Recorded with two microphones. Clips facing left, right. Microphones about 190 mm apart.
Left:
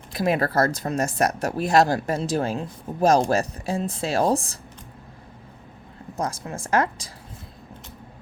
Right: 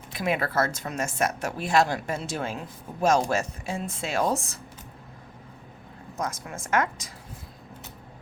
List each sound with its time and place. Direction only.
0.1 s speech: 40° left (ahead or behind)
6.1 s speech: 30° left (ahead or behind)